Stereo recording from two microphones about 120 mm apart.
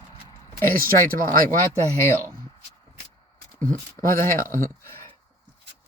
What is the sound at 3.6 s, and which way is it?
Speech, 20° left (ahead or behind).